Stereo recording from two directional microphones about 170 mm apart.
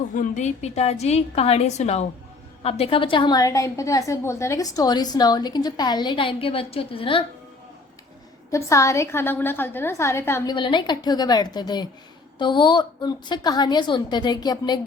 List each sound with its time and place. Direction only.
0.1 s a woman's voice: 50° left (ahead or behind); by 7.3 s 30° left (ahead or behind)
8.4 s a woman's voice: 20° left (ahead or behind)
10.5 s a woman's voice: 30° left (ahead or behind)